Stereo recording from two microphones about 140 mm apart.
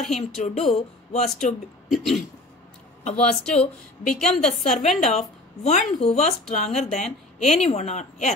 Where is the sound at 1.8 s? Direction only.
Centre (ahead or behind).